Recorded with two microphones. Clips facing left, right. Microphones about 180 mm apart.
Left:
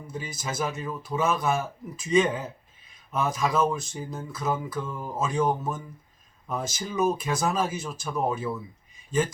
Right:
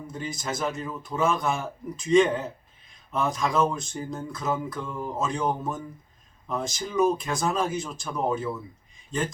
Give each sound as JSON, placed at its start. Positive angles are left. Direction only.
{"t": 0.1, "sound": "speech", "side_deg": 5}